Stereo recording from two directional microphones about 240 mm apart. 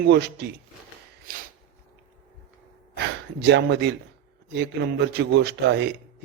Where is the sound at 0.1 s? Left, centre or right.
Right.